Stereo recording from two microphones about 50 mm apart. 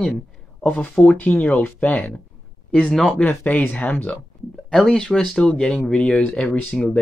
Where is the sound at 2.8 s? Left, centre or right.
Centre.